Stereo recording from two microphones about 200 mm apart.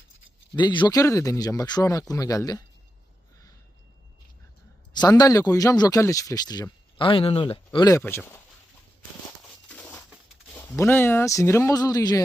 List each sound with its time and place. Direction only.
0.5 s speech: 25° left (ahead or behind)
4.9 s speech: 20° left (ahead or behind)
9.6 s crumpling: 5° left (ahead or behind)
10.5 s speech: 10° left (ahead or behind)